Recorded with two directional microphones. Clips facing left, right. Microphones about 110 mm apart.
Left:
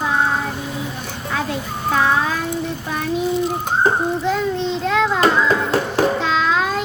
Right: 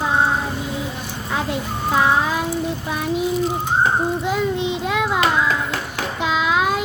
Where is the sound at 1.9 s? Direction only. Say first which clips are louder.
Even; 15° right (ahead or behind).